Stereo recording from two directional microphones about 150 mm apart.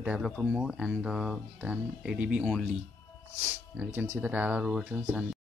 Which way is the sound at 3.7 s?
10° right (ahead or behind).